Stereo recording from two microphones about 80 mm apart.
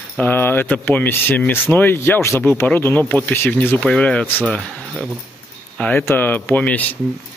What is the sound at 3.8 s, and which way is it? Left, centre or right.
Speech, centre.